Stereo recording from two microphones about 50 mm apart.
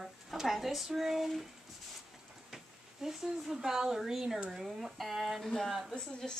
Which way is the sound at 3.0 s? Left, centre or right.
Centre.